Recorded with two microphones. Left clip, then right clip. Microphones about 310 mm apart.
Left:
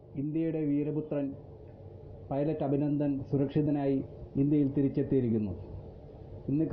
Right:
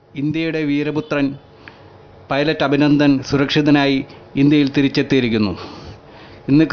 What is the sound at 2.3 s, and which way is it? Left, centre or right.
Speech, centre.